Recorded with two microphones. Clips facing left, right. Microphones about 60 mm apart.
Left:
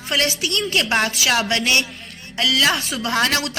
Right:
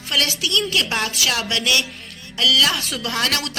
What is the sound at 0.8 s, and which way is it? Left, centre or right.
A woman's voice, left.